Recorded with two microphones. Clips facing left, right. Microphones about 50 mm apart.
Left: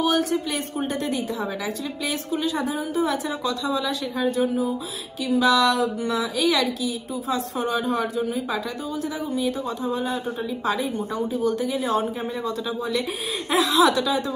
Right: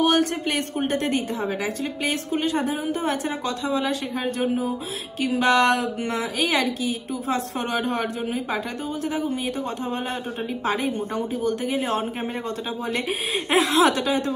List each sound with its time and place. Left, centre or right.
0.0 s a woman's voice: right
2.0 s a woman's voice: right
13.5 s a woman's voice: right